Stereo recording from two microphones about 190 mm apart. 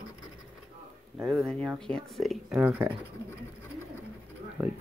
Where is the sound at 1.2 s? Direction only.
Centre (ahead or behind).